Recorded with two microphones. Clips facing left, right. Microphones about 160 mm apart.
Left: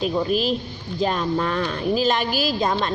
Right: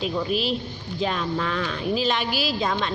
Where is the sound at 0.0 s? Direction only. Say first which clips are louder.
Left 4 dB; 45° left (ahead or behind).